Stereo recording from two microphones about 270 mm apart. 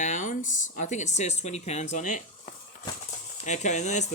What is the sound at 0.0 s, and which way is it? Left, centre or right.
Speech, left.